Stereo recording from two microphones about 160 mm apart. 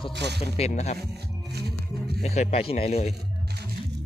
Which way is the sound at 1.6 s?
85° right.